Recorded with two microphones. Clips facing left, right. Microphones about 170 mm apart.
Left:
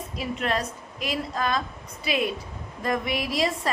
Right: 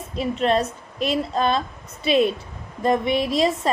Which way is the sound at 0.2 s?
25° right (ahead or behind).